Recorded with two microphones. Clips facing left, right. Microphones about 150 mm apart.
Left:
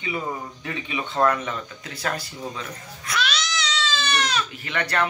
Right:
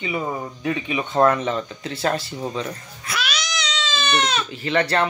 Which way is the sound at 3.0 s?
10° right (ahead or behind).